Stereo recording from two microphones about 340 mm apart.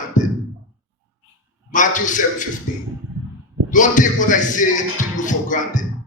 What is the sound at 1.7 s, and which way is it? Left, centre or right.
Speech, left.